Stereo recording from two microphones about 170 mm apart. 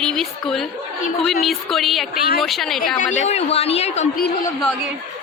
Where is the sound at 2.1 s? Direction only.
65° left (ahead or behind).